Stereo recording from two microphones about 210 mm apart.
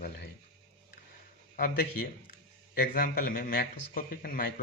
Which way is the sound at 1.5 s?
45° left (ahead or behind).